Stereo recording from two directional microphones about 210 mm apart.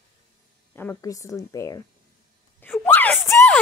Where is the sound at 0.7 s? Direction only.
10° left (ahead or behind).